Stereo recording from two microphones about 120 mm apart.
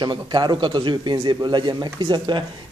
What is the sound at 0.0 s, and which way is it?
Speech, 40° right (ahead or behind).